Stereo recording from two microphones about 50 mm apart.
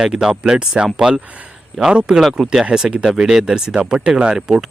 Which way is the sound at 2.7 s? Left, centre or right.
Right.